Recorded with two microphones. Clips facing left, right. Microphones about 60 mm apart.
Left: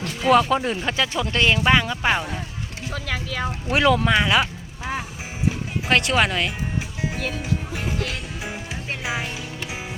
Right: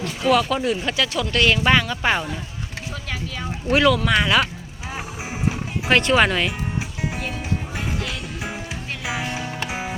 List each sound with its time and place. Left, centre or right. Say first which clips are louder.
0.3 s speech: left 1 dB; left; by 2.2 s centre
2.9 s speech: left 4 dB; left
3.8 s speech: even; centre
5.9 s speech: right 3 dB; centre
9.6 s music: right 4 dB; right